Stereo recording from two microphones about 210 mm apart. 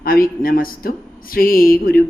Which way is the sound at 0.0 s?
45° left (ahead or behind).